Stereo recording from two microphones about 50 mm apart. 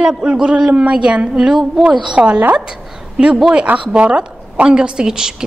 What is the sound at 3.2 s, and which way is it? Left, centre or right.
A woman's voice, centre.